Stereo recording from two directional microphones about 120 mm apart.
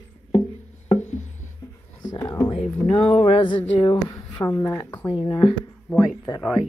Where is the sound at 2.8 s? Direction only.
55° left (ahead or behind).